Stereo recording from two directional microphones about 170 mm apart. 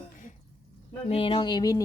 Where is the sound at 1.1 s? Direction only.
30° left (ahead or behind).